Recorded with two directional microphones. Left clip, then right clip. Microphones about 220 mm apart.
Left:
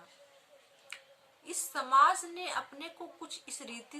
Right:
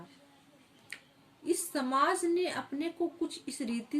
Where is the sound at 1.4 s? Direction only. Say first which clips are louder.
Right 5 dB; 15° left (ahead or behind).